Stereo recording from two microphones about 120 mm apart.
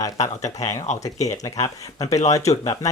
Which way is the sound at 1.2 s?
30° left (ahead or behind).